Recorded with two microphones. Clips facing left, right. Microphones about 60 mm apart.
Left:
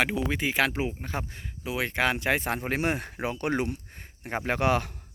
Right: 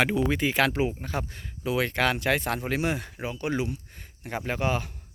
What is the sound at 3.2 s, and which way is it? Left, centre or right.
Speech, left.